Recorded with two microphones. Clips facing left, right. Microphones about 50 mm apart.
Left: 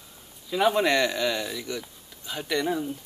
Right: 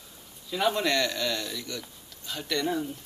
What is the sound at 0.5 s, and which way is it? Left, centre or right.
Speech, centre.